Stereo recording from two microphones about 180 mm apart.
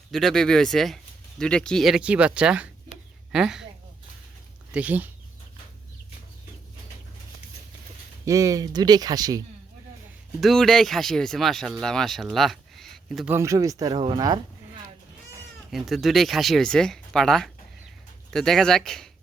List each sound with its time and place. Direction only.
0.1 s speech: centre (ahead or behind)
4.7 s speech: 10° right (ahead or behind)
8.2 s speech: 20° right (ahead or behind)
10.4 s speech: centre (ahead or behind)
13.3 s speech: 15° right (ahead or behind)
15.7 s speech: centre (ahead or behind)